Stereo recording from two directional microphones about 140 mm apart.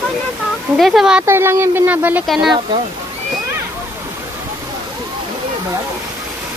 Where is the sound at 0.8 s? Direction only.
Centre (ahead or behind).